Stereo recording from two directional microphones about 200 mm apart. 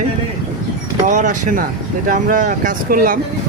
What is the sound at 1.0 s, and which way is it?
Speech, 40° right (ahead or behind).